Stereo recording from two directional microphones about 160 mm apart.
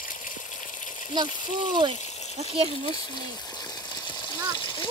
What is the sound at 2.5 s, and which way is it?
Speech, 35° right (ahead or behind).